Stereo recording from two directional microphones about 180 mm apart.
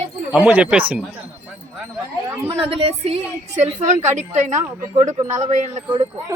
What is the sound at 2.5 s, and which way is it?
A woman's voice, 30° right (ahead or behind).